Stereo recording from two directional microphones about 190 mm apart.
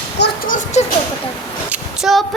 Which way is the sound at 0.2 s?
45° left (ahead or behind).